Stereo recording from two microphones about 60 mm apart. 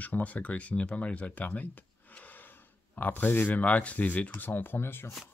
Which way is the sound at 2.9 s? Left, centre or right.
Left.